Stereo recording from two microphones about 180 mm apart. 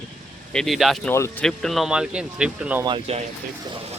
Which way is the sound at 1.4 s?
Centre (ahead or behind).